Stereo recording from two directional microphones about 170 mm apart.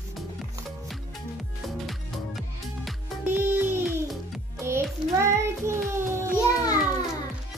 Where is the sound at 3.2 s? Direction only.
15° right (ahead or behind).